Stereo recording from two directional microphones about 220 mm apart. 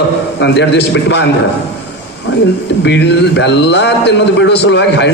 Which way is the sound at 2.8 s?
50° left (ahead or behind).